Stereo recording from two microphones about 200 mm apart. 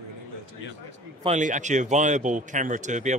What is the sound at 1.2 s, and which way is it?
A man's voice, 35° right (ahead or behind).